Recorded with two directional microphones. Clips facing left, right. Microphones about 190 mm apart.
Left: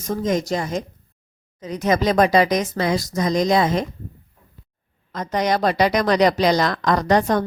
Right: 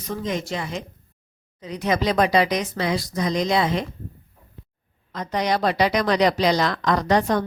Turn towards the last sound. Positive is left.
turn(degrees=45)  # may be behind; listen again after turning